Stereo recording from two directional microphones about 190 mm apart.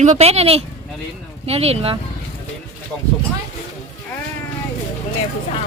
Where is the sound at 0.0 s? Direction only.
35° right (ahead or behind).